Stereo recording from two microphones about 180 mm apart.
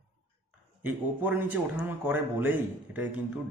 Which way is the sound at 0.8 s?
10° right (ahead or behind).